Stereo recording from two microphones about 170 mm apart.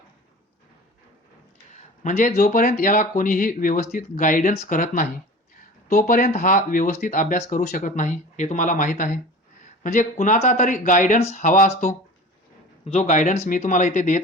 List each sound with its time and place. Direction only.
1.7 s speech: 45° left (ahead or behind)